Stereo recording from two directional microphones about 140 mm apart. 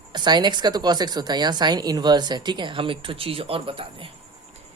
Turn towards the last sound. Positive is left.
turn(degrees=-40)  # may be behind; listen again after turning